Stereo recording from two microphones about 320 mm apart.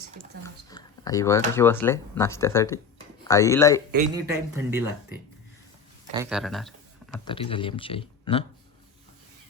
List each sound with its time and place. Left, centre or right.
0.4 s speech: centre
4.1 s speech: centre
6.2 s speech: centre
7.3 s speech: centre